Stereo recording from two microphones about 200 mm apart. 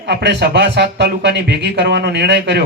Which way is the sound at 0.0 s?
55° right (ahead or behind).